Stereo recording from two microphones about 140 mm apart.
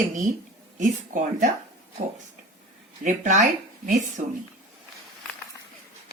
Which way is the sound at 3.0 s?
60° right (ahead or behind).